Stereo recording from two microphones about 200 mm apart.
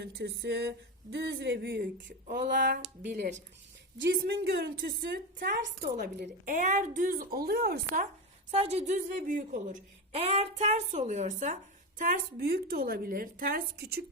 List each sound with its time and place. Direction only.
0.0 s speech: 55° right (ahead or behind)
4.2 s a woman's voice: 55° right (ahead or behind)
8.4 s speech: 30° right (ahead or behind)
10.1 s a woman's voice: 30° right (ahead or behind); by 14.0 s 50° right (ahead or behind)